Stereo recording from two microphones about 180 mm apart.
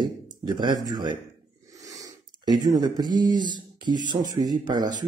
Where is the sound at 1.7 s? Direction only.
20° right (ahead or behind).